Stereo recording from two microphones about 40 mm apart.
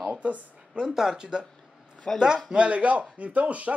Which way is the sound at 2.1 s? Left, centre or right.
Centre.